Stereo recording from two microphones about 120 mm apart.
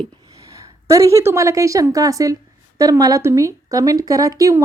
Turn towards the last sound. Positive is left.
turn(degrees=-30)  # may be behind; listen again after turning